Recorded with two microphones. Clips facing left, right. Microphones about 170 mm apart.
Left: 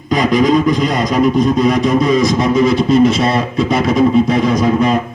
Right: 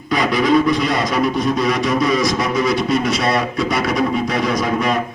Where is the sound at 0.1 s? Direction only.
45° left (ahead or behind).